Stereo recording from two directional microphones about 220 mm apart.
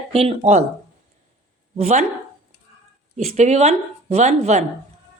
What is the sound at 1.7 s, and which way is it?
Speech, 30° right (ahead or behind).